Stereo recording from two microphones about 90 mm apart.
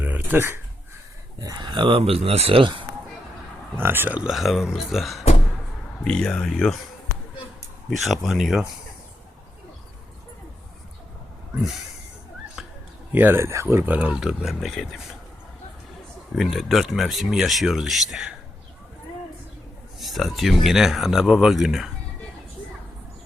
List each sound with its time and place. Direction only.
0.0 s speech: 20° right (ahead or behind)
1.5 s speech: 65° right (ahead or behind)
3.8 s speech: 25° right (ahead or behind)
4.2 s speech: 5° right (ahead or behind)
6.1 s speech: 10° left (ahead or behind)
7.9 s speech: centre (ahead or behind)
12.6 s a sound: centre (ahead or behind)
13.1 s speech: 25° right (ahead or behind)
13.8 s speech: 15° right (ahead or behind); by 14.8 s centre (ahead or behind)
16.4 s speech: centre (ahead or behind)
20.0 s speech: centre (ahead or behind)